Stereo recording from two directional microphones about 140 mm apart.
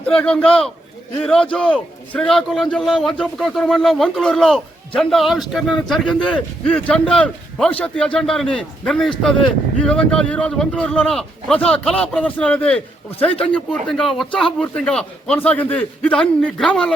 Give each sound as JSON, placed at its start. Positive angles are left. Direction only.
{"t": 0.0, "sound": "a man's voice", "side_deg": 10}